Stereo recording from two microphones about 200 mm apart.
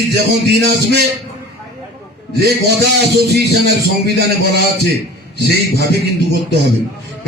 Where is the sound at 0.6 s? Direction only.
55° right (ahead or behind).